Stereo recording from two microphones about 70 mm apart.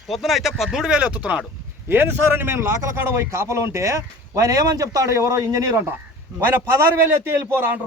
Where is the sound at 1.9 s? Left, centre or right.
Right.